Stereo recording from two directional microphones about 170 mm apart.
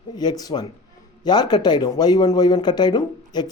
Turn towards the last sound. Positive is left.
turn(degrees=25)  # may be behind; listen again after turning